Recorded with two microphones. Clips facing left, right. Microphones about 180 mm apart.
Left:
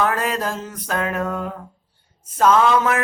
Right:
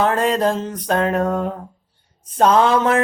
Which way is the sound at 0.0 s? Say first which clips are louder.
Right 5 dB; 30° right (ahead or behind).